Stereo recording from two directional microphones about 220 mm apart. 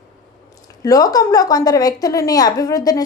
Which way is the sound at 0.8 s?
15° left (ahead or behind).